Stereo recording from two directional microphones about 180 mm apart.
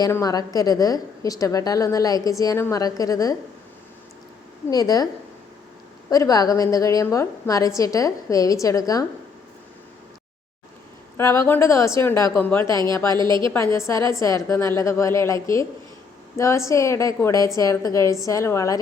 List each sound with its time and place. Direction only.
0.0 s a woman's voice: 20° left (ahead or behind)
4.7 s a woman's voice: 20° left (ahead or behind)
6.1 s a woman's voice: 20° left (ahead or behind)
11.2 s a woman's voice: 15° left (ahead or behind)
13.1 s a woman's voice: 25° right (ahead or behind)
13.7 s a woman's voice: 15° left (ahead or behind)